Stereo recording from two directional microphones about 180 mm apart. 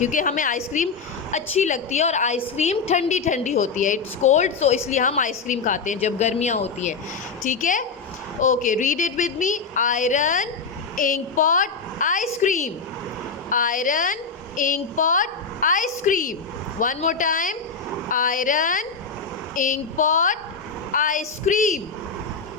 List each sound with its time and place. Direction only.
0.0 s a woman's voice: 45° left (ahead or behind)